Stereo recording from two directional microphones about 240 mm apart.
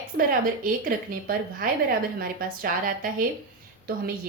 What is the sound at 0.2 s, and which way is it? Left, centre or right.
A woman's voice, right.